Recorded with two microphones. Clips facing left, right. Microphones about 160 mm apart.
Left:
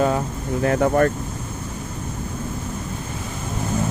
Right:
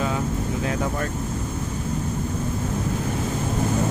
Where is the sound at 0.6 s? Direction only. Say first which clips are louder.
Left 12 dB; 60° left (ahead or behind).